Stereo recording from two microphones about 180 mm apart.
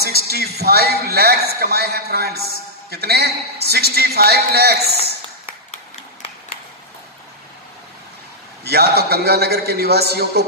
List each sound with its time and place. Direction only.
0.0 s a man's voice: 60° right (ahead or behind)
8.6 s a man's voice: 60° right (ahead or behind)